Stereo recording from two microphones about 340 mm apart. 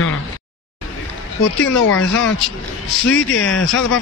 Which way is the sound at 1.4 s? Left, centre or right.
Left.